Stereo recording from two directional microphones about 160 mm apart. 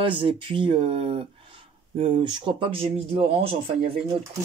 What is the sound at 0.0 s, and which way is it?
Speech, 35° right (ahead or behind).